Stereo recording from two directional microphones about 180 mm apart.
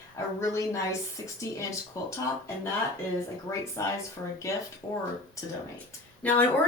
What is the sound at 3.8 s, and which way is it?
Speech, 15° left (ahead or behind).